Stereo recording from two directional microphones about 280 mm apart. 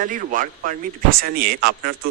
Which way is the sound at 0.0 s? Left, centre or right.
Right.